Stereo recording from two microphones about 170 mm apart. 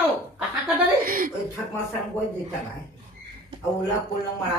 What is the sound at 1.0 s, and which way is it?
Speech, 55° right (ahead or behind).